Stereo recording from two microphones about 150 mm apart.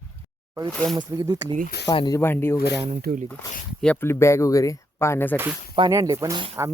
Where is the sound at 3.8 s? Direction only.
10° left (ahead or behind).